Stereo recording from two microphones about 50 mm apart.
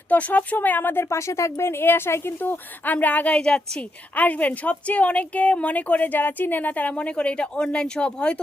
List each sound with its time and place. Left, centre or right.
0.1 s speech: left
1.1 s a woman's voice: left
2.4 s speech: left
3.4 s a woman's voice: centre
4.1 s a woman's voice: left